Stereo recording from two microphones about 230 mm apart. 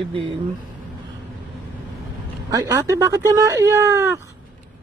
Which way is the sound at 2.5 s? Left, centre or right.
Centre.